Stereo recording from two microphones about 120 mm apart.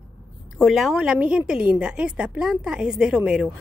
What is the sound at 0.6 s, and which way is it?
A woman's voice, centre (ahead or behind).